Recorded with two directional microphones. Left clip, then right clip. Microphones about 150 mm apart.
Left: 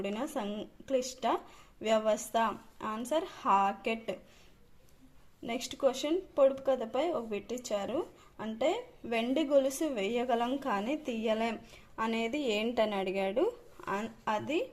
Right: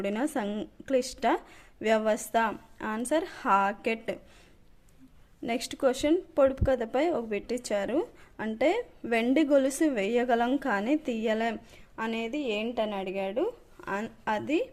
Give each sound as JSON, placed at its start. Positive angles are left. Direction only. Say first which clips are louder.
{"t": 0.0, "sound": "speech", "louder": "right 5 dB", "side_deg": -45}
{"t": 5.4, "sound": "speech", "louder": "right 3 dB", "side_deg": -45}
{"t": 13.9, "sound": "a woman's voice", "louder": "right 3 dB", "side_deg": -35}